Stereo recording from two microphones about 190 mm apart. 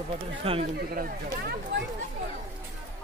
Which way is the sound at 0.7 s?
55° right (ahead or behind).